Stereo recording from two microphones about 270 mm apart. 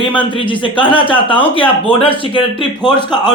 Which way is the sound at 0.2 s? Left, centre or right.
Centre.